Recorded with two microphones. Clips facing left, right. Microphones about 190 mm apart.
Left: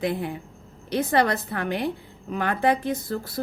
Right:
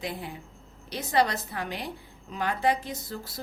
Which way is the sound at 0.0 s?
55° left (ahead or behind).